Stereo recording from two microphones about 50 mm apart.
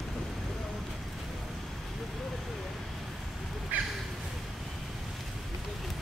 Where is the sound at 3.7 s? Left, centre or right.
Right.